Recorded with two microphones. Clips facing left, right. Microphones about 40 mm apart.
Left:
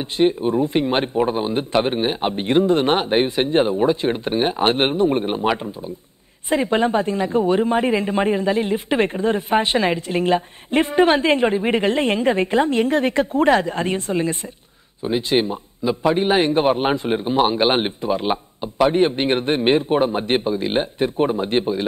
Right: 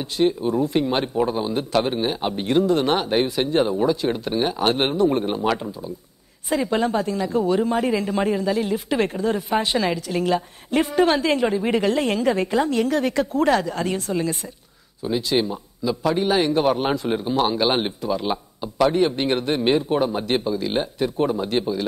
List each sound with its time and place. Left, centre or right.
0.0 s a man's voice: left